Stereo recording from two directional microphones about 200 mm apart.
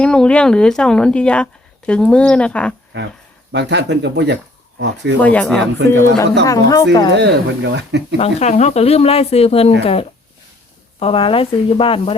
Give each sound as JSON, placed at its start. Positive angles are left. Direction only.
{"t": 0.0, "sound": "speech", "side_deg": 5}
{"t": 3.5, "sound": "speech", "side_deg": -60}
{"t": 5.2, "sound": "speech", "side_deg": 5}
{"t": 7.1, "sound": "speech", "side_deg": -60}
{"t": 8.2, "sound": "speech", "side_deg": 35}